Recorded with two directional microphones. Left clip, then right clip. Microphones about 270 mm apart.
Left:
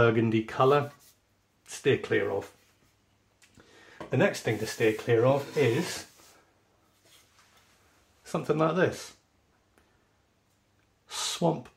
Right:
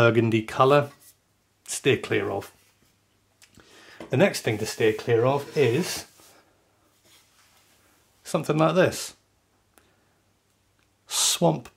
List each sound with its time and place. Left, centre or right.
0.0 s speech: right
8.2 s speech: right
11.1 s speech: right